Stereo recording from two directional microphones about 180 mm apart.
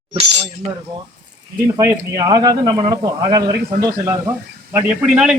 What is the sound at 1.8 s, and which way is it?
Speech, 15° right (ahead or behind).